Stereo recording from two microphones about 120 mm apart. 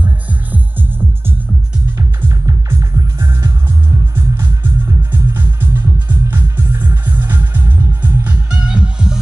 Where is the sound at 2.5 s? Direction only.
25° right (ahead or behind).